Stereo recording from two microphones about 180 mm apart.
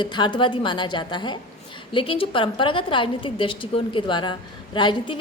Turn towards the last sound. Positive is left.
turn(degrees=25)  # may be behind; listen again after turning